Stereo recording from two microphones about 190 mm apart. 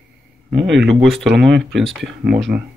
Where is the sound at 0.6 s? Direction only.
70° right (ahead or behind).